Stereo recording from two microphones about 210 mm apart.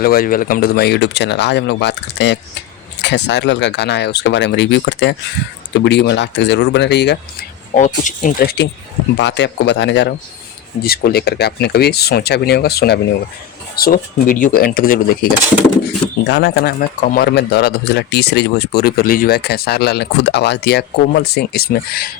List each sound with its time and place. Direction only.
0.0 s speech: 45° left (ahead or behind)
7.7 s speech: 35° left (ahead or behind)
9.1 s speech: 55° left (ahead or behind)
16.2 s speech: 55° left (ahead or behind)